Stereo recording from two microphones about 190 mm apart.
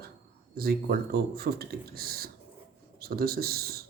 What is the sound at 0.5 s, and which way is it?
Speech, 50° right (ahead or behind).